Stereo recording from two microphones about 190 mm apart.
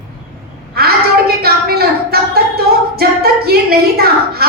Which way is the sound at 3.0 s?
55° right (ahead or behind).